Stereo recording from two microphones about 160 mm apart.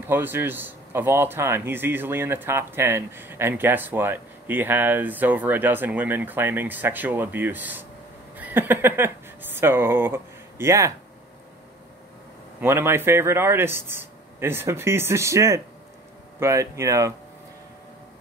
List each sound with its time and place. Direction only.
0.0 s speech: 15° right (ahead or behind)
12.5 s speech: 15° right (ahead or behind)